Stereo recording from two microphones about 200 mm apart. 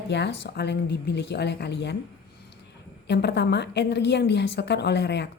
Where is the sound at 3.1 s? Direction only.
60° left (ahead or behind).